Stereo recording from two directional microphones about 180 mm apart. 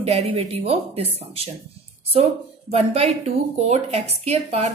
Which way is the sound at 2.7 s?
35° right (ahead or behind).